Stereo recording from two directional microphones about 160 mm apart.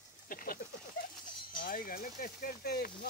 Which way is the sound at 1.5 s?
60° left (ahead or behind).